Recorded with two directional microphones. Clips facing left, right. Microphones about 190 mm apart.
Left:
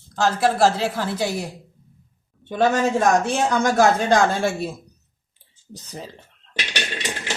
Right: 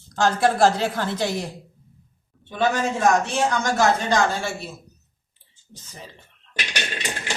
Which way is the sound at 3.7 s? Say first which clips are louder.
Left 4 dB; 55° left (ahead or behind).